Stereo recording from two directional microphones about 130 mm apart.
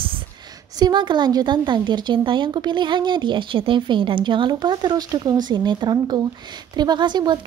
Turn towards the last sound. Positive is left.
turn(degrees=-35)  # may be behind; listen again after turning